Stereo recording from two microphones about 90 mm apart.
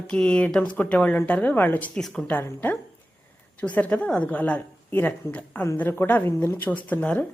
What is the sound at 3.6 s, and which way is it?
A woman's voice, 15° left (ahead or behind).